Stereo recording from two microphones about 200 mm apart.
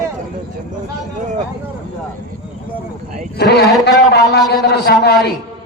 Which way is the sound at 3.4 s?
55° left (ahead or behind).